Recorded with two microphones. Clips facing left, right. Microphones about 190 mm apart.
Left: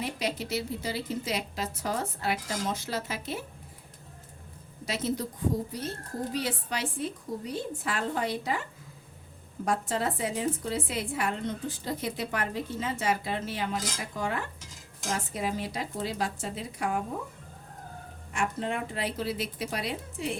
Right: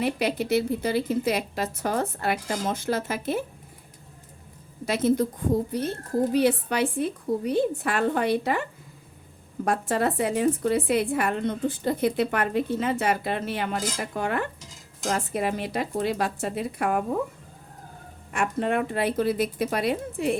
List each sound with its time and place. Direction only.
0.0 s speech: 60° right (ahead or behind)
4.9 s a woman's voice: 55° right (ahead or behind)
6.3 s speech: 60° right (ahead or behind)
9.6 s speech: 60° right (ahead or behind)
18.3 s speech: 60° right (ahead or behind)